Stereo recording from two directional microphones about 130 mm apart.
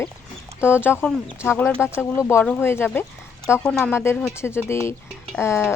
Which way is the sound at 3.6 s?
5° left (ahead or behind).